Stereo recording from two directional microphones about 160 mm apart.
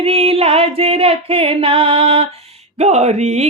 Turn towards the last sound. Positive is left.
turn(degrees=-45)  # may be behind; listen again after turning